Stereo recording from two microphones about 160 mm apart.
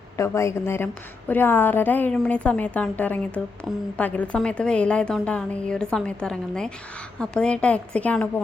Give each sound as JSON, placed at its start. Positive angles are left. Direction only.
{"t": 0.2, "sound": "a woman's voice", "side_deg": 15}